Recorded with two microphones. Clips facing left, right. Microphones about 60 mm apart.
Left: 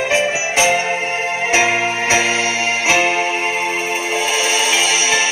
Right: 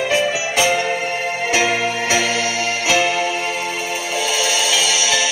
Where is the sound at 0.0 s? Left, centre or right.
Centre.